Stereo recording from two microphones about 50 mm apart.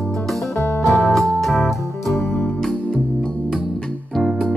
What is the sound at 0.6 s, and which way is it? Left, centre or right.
Music, left.